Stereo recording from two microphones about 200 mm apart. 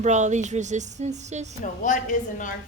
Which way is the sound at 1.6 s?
40° left (ahead or behind).